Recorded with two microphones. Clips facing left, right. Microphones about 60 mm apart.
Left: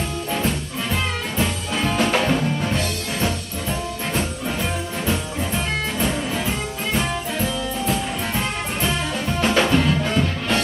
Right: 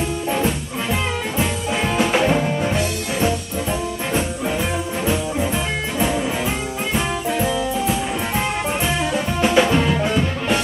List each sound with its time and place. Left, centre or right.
1.4 s music: centre
6.9 s music: centre